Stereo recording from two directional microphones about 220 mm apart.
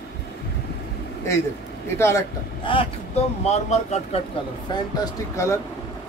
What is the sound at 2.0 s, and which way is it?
Speech, 10° left (ahead or behind).